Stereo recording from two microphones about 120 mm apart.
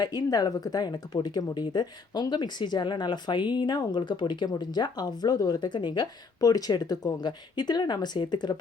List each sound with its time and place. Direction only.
0.0 s speech: 35° left (ahead or behind)